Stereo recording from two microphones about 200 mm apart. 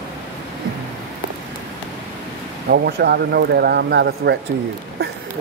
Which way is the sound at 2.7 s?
55° right (ahead or behind).